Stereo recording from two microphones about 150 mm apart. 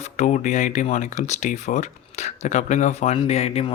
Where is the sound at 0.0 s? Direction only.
50° left (ahead or behind).